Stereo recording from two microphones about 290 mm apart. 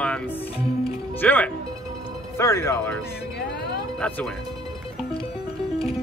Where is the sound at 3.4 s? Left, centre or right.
Left.